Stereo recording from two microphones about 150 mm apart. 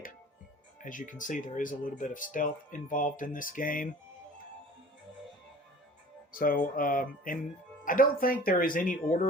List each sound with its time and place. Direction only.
0.8 s speech: 60° left (ahead or behind)
6.3 s speech: 70° left (ahead or behind)